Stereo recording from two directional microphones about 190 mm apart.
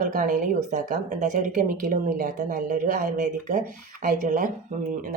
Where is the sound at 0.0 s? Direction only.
45° right (ahead or behind).